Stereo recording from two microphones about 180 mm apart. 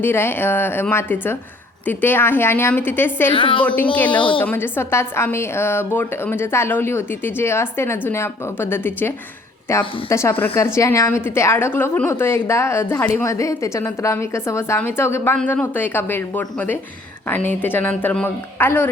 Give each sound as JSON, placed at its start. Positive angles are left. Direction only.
{"t": 0.0, "sound": "a woman's voice", "side_deg": 15}
{"t": 3.3, "sound": "a woman's voice", "side_deg": 30}
{"t": 3.6, "sound": "a woman's voice", "side_deg": 10}